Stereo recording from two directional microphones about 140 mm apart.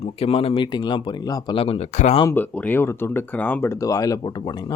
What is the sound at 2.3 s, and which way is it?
Speech, 10° left (ahead or behind).